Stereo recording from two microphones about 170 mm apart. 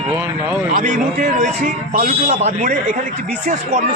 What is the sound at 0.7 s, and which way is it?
A man's voice, 50° right (ahead or behind).